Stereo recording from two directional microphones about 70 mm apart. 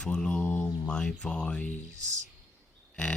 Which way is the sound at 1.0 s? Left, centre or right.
Centre.